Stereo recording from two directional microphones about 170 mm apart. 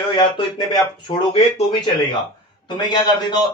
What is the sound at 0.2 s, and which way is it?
Speech, 25° left (ahead or behind).